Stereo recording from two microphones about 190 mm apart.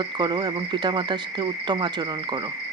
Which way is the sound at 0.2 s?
25° right (ahead or behind).